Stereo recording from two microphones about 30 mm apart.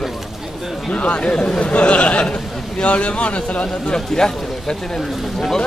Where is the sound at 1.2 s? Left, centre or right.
Left.